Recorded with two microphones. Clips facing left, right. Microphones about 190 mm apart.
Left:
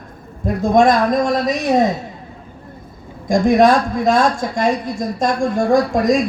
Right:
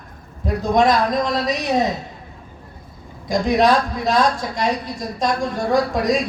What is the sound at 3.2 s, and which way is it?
Speech, 50° left (ahead or behind).